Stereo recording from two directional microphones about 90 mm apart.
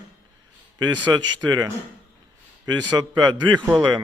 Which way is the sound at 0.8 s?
55° right (ahead or behind).